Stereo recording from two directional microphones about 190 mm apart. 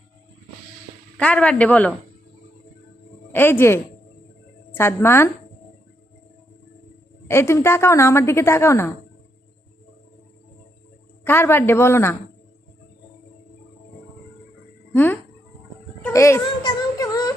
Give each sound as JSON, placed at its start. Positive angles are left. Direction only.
{"t": 1.1, "sound": "a woman's voice", "side_deg": 5}
{"t": 3.3, "sound": "a woman's voice", "side_deg": 10}
{"t": 7.3, "sound": "a woman's voice", "side_deg": 15}
{"t": 11.2, "sound": "a woman's voice", "side_deg": 10}
{"t": 14.9, "sound": "a woman's voice", "side_deg": 10}
{"t": 16.1, "sound": "a sound", "side_deg": 15}